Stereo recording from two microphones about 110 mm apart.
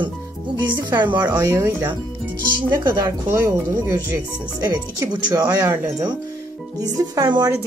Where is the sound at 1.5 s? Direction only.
20° right (ahead or behind).